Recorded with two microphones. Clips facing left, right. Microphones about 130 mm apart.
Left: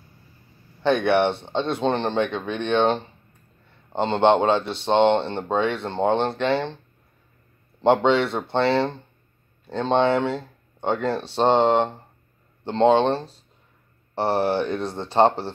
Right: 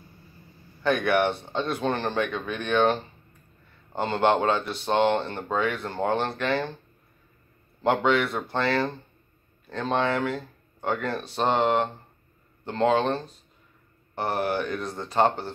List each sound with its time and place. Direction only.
0.8 s speech: 25° left (ahead or behind)
7.8 s speech: 25° left (ahead or behind)